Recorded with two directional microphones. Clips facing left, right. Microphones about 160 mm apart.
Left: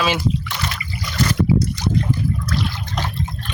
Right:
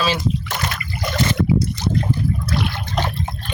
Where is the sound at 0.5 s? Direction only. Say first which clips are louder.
Right 2 dB; 50° right (ahead or behind).